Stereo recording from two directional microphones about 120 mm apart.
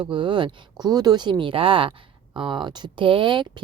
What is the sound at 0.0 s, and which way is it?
Speech, 40° right (ahead or behind).